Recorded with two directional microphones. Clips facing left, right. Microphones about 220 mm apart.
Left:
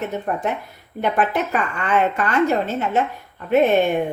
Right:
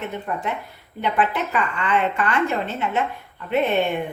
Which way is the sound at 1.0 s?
45° left (ahead or behind).